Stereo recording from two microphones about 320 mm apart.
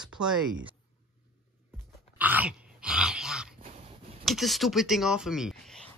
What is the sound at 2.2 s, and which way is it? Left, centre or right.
Dog, centre.